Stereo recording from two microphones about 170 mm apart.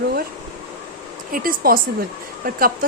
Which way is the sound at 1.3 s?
60° right (ahead or behind).